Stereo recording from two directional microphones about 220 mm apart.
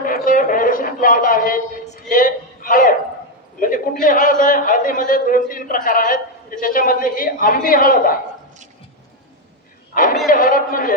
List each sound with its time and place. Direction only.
0.0 s a sound: 40° left (ahead or behind)
4.0 s a man's voice: 40° left (ahead or behind)
9.9 s a man's voice: 40° left (ahead or behind)